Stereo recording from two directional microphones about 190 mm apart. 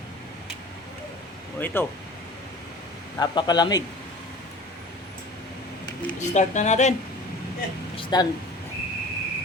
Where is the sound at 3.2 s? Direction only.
25° left (ahead or behind).